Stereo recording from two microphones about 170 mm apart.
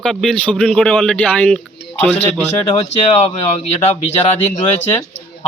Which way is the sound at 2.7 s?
35° left (ahead or behind).